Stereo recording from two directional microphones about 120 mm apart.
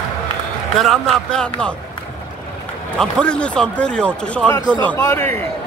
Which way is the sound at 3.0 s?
10° left (ahead or behind).